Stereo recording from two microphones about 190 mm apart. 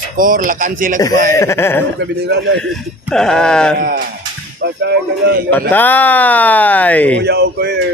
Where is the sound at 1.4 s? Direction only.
15° left (ahead or behind).